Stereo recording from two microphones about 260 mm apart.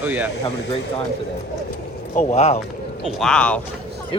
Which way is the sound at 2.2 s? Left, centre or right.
Left.